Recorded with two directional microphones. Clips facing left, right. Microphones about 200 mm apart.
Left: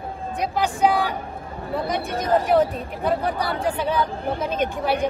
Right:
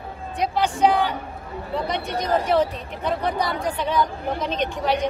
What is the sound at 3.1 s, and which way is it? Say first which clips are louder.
Speech: even; 5° left (ahead or behind).